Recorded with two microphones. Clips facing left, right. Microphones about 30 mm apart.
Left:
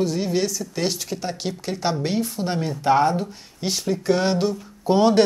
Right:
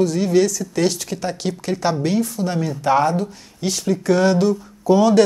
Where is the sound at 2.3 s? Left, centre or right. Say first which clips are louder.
Right 3 dB; left.